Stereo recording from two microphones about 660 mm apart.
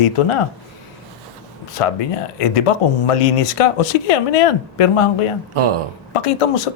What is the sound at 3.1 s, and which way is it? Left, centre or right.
Speech, left.